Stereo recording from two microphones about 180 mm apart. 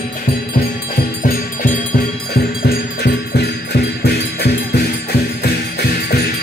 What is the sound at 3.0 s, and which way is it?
Music, 65° left (ahead or behind).